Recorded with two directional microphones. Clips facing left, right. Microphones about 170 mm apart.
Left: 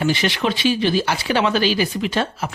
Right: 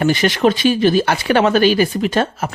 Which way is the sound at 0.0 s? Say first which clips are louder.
Right 6 dB; 45° right (ahead or behind).